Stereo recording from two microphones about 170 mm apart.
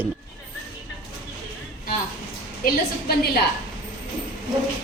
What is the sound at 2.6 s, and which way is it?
Speech, 55° left (ahead or behind).